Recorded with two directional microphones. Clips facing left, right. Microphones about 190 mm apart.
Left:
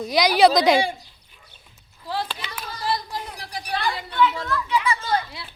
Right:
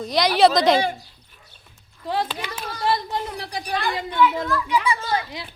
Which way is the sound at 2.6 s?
25° right (ahead or behind).